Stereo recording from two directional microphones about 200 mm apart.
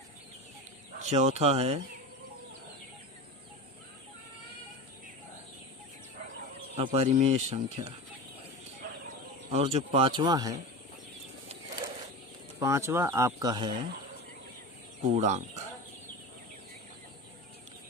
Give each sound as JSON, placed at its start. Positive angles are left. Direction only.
{"t": 0.9, "sound": "speech", "side_deg": -35}
{"t": 6.7, "sound": "speech", "side_deg": -30}
{"t": 9.5, "sound": "speech", "side_deg": -30}
{"t": 12.5, "sound": "speech", "side_deg": -15}
{"t": 15.1, "sound": "speech", "side_deg": -35}